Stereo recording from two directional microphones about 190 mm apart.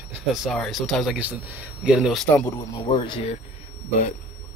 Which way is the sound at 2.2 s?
10° left (ahead or behind).